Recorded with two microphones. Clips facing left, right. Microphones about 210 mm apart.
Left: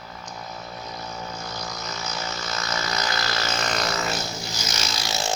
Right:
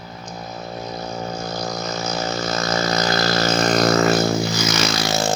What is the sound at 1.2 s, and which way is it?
Vehicle, 40° right (ahead or behind).